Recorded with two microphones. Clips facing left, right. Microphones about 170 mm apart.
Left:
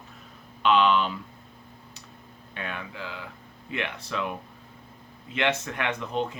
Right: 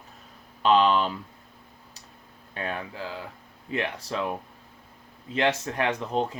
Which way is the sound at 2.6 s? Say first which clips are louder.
Right 3 dB; 35° right (ahead or behind).